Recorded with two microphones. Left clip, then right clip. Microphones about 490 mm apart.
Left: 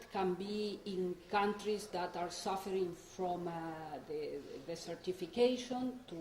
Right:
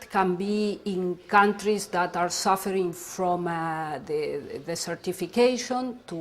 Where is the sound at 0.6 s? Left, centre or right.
Right.